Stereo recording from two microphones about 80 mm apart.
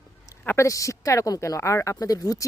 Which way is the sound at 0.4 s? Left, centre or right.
Left.